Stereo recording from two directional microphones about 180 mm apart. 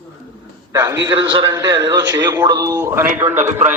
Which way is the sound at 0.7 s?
20° right (ahead or behind).